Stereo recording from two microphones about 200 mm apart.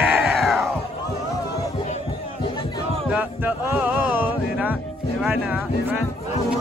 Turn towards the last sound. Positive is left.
turn(degrees=-5)  # may be behind; listen again after turning